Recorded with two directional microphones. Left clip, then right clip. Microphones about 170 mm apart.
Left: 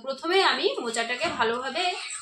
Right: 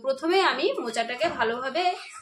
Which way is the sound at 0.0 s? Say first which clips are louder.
Right 1 dB; 25° right (ahead or behind).